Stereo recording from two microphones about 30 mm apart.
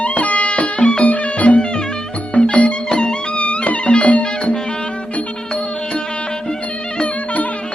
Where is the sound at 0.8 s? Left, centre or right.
Left.